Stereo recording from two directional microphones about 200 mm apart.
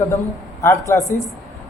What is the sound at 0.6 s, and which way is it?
Speech, 15° left (ahead or behind).